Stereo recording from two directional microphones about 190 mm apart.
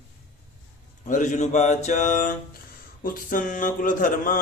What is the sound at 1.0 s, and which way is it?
A man's voice, 40° left (ahead or behind).